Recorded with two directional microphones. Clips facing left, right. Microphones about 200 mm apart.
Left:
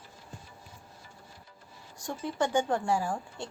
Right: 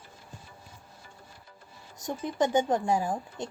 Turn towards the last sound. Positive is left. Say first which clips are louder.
# right 2 dB
turn(degrees=-20)  # may be behind; listen again after turning